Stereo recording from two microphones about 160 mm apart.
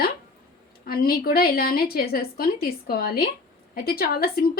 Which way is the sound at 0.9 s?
65° left (ahead or behind).